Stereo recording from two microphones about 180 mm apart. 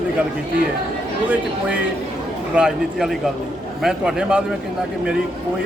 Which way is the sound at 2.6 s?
Centre (ahead or behind).